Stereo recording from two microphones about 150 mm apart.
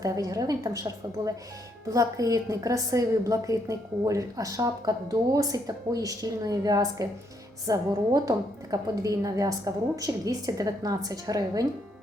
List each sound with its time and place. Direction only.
0.0 s a woman's voice: 20° right (ahead or behind)